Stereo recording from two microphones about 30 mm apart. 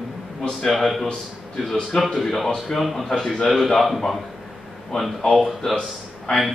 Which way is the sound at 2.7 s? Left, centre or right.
Centre.